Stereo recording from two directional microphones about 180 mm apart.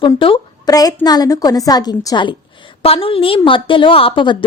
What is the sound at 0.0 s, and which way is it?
A woman's voice, 30° left (ahead or behind).